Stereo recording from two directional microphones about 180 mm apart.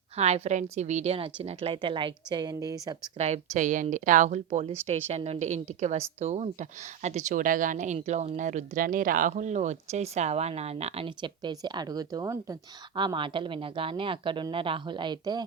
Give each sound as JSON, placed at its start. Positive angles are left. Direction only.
{"t": 0.2, "sound": "a woman's voice", "side_deg": -35}
{"t": 3.2, "sound": "a woman's voice", "side_deg": -40}